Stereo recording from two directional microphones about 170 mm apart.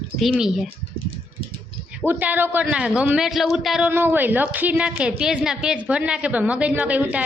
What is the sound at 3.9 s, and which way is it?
A man's voice, 10° right (ahead or behind).